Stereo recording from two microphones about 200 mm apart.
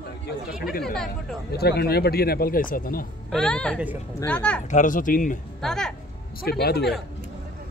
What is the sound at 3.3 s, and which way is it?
Speech, 5° left (ahead or behind).